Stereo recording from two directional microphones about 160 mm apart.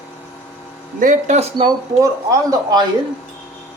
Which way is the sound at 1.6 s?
20° right (ahead or behind).